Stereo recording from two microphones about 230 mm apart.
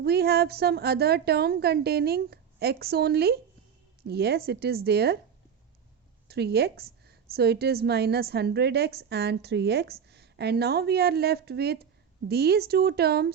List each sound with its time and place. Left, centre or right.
0.0 s a woman's voice: right
6.2 s a woman's voice: right